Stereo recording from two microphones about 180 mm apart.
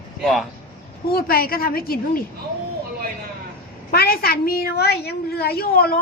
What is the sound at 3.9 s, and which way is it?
A woman's voice, 55° left (ahead or behind).